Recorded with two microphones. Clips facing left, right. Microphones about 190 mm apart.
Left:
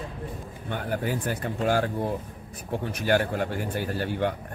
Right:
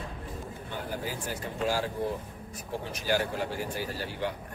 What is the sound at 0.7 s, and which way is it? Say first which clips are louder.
Speech: left 7 dB; 60° left (ahead or behind).